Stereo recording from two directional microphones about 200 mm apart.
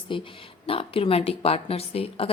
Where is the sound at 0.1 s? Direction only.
25° left (ahead or behind).